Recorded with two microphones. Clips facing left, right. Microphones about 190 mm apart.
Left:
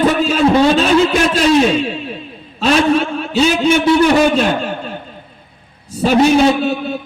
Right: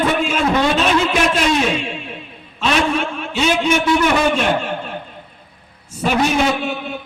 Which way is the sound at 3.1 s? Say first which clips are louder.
Left 4 dB; 35° left (ahead or behind).